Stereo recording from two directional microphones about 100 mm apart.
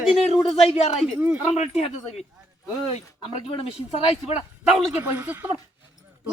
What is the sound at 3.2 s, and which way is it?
A man's voice, 70° left (ahead or behind).